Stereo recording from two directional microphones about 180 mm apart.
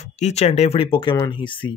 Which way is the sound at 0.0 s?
40° left (ahead or behind).